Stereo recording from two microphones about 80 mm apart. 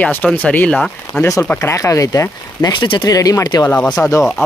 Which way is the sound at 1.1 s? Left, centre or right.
Centre.